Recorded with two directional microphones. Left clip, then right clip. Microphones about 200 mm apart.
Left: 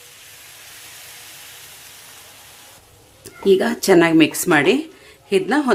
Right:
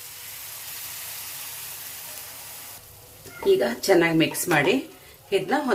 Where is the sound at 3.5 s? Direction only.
55° left (ahead or behind).